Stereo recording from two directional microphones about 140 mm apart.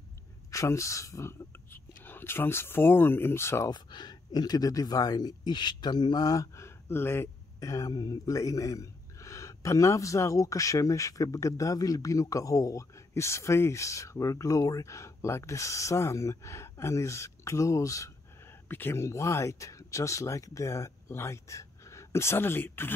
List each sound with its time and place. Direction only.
0.5 s speech: 20° left (ahead or behind)
3.7 s speech: 30° left (ahead or behind)